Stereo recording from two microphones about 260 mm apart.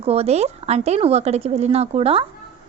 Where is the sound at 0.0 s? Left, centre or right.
Right.